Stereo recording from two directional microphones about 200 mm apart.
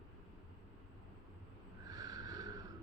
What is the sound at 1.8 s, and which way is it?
Snort, 15° right (ahead or behind).